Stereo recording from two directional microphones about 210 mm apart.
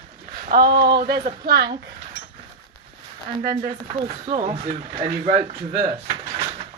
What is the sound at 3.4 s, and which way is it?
Speech, 45° right (ahead or behind).